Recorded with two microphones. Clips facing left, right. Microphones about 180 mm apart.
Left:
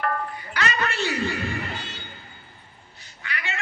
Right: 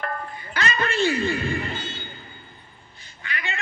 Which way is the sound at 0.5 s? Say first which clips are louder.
Right 2 dB; 25° right (ahead or behind).